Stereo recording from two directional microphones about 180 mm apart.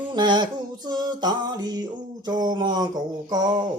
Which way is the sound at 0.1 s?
25° right (ahead or behind).